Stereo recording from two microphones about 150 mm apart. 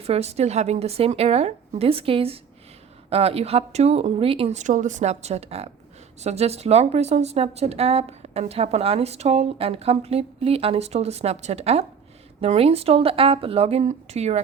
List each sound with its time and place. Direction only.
0.0 s a woman's voice: 45° right (ahead or behind)